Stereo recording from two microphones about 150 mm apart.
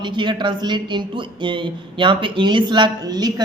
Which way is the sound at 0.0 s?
30° right (ahead or behind).